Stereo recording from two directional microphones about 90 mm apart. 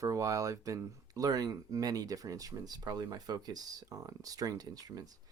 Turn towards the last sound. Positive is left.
turn(degrees=-45)  # may be behind; listen again after turning